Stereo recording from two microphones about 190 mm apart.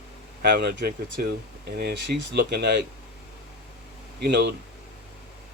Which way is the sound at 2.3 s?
60° right (ahead or behind).